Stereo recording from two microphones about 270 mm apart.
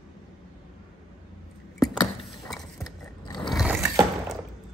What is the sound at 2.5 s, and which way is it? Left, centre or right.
Mechanisms, centre.